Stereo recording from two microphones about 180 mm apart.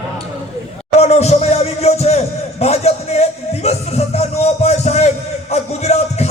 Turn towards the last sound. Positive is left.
turn(degrees=35)  # may be behind; listen again after turning